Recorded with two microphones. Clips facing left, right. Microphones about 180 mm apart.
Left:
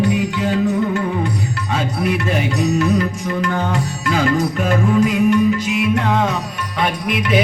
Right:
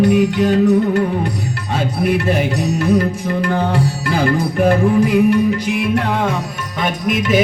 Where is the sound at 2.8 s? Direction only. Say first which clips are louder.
Right 2 dB; 55° right (ahead or behind).